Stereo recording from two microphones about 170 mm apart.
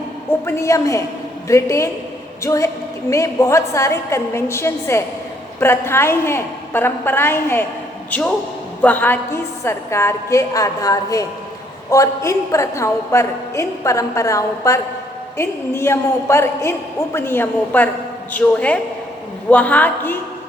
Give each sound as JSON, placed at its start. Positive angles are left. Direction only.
{"t": 0.4, "sound": "a woman's voice", "side_deg": 15}